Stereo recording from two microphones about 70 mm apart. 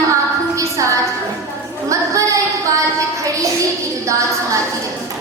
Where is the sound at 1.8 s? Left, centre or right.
Right.